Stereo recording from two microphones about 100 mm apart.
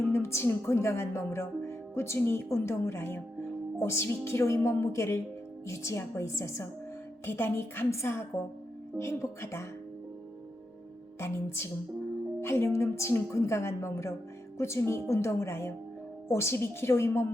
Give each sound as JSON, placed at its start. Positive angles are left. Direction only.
{"t": 0.1, "sound": "speech", "side_deg": 25}
{"t": 11.2, "sound": "speech", "side_deg": 25}